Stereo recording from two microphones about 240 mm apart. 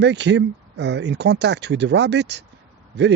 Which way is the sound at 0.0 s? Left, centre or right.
Right.